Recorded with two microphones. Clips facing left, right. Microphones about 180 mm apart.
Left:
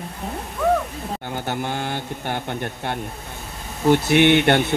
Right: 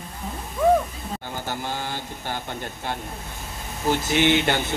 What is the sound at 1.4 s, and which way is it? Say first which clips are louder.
Speech: left 4 dB; 60° left (ahead or behind).